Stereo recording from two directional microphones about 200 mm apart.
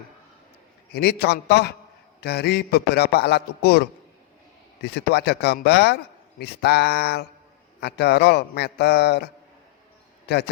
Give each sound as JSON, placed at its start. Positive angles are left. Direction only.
{"t": 0.9, "sound": "a man's voice", "side_deg": 55}